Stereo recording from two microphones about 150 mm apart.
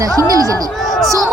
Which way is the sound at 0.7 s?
Centre (ahead or behind).